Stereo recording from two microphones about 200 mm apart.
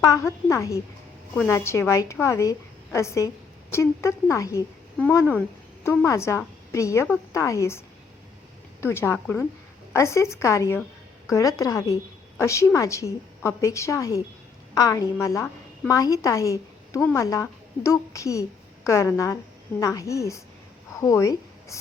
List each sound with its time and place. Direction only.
0.0 s a woman's voice: 15° left (ahead or behind)
8.8 s a woman's voice: 10° left (ahead or behind)
20.9 s a sound: 15° left (ahead or behind)